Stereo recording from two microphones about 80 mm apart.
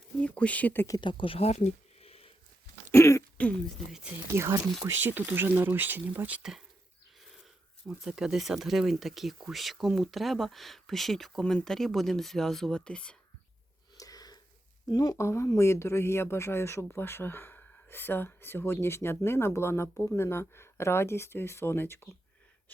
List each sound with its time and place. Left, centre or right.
0.2 s speech: centre
1.0 s speech: left
2.9 s throat clearing: left
4.4 s speech: right
7.9 s speech: centre
13.9 s a sound: left
14.8 s speech: left
15.2 s speech: left
20.0 s speech: left